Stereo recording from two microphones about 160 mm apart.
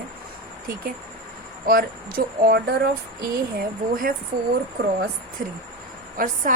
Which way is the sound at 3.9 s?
60° right (ahead or behind).